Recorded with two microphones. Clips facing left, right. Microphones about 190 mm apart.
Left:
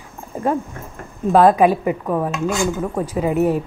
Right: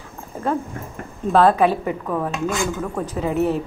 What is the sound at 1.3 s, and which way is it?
Speech, 15° left (ahead or behind).